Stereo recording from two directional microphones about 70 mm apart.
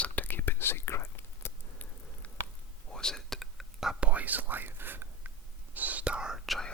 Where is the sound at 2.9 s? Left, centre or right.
Centre.